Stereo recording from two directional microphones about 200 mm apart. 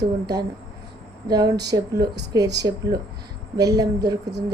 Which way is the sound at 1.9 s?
55° right (ahead or behind).